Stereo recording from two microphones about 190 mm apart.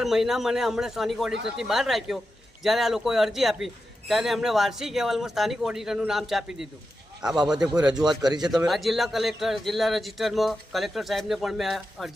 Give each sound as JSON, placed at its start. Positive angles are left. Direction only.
{"t": 0.0, "sound": "speech", "side_deg": 0}
{"t": 7.9, "sound": "a man's voice", "side_deg": -20}
{"t": 8.4, "sound": "speech", "side_deg": 0}